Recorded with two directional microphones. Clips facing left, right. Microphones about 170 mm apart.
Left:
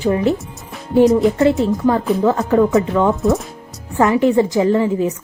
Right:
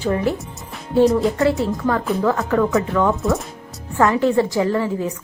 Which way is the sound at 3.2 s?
Centre (ahead or behind).